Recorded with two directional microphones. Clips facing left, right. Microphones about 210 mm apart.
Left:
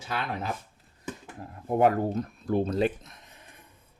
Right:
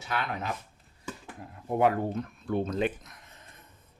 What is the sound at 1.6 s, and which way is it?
Speech, 45° left (ahead or behind).